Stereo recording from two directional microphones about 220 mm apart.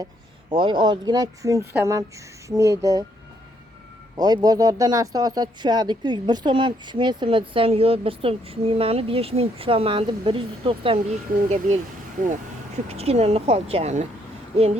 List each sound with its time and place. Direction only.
0.5 s speech: 20° right (ahead or behind)
4.2 s speech: 15° right (ahead or behind)
12.9 s speech: 25° right (ahead or behind)